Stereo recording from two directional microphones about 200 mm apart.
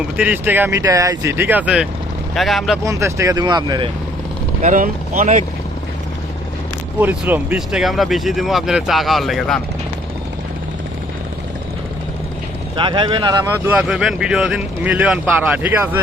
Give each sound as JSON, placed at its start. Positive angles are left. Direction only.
{"t": 0.2, "sound": "speech", "side_deg": -10}
{"t": 2.8, "sound": "speech", "side_deg": -15}
{"t": 4.6, "sound": "speech", "side_deg": -40}
{"t": 7.0, "sound": "speech", "side_deg": -10}
{"t": 12.7, "sound": "speech", "side_deg": -25}